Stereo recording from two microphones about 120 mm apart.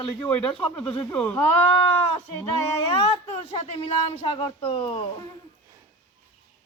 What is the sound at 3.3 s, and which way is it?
Speech, 50° left (ahead or behind).